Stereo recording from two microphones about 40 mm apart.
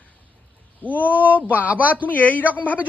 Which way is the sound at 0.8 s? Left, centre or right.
Left.